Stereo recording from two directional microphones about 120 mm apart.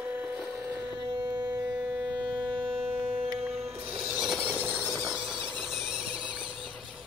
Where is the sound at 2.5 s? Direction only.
45° right (ahead or behind).